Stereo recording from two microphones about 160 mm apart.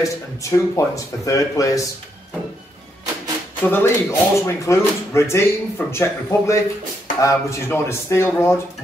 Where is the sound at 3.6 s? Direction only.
15° left (ahead or behind).